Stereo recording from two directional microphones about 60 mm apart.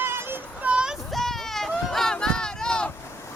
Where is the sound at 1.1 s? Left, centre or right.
Centre.